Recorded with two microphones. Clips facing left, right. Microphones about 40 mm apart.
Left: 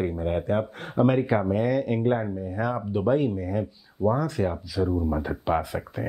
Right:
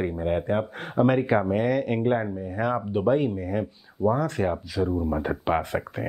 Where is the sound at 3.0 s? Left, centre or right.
Right.